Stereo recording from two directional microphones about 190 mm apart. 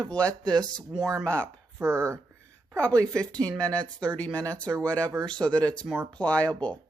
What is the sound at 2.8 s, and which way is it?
Speech, 5° left (ahead or behind).